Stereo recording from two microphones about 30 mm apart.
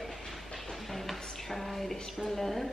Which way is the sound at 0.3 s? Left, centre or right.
Centre.